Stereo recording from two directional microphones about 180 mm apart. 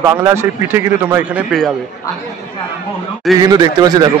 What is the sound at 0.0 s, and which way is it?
Speech, 15° right (ahead or behind).